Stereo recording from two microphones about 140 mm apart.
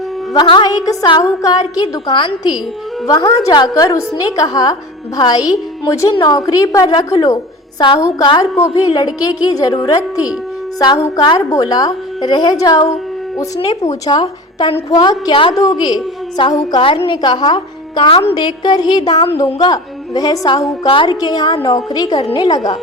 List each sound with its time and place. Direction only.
0.3 s a woman's voice: 35° left (ahead or behind)
14.1 s a woman's voice: 35° left (ahead or behind)
15.3 s a woman's voice: 40° left (ahead or behind)
16.5 s a woman's voice: 25° left (ahead or behind)
16.8 s a woman's voice: 40° left (ahead or behind)